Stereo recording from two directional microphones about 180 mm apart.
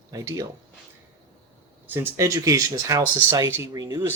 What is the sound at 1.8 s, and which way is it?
Speech, 15° right (ahead or behind).